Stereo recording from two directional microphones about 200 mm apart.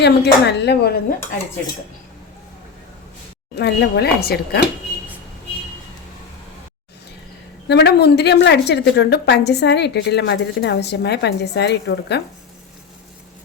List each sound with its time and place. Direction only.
0.0 s a woman's voice: 60° left (ahead or behind)
3.6 s speech: 55° left (ahead or behind)
7.7 s a woman's voice: 55° left (ahead or behind)